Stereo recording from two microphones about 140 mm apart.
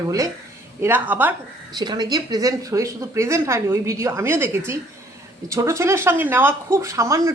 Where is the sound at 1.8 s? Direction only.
30° right (ahead or behind).